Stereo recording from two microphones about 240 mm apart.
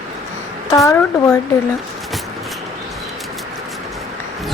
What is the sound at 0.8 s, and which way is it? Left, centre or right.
Speech, centre.